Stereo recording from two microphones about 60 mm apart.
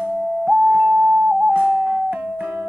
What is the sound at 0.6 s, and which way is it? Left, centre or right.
Music, right.